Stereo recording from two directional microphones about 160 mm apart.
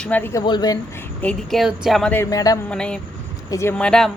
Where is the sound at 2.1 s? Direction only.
15° left (ahead or behind).